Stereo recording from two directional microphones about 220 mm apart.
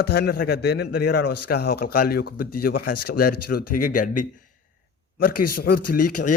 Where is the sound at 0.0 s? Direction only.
45° left (ahead or behind).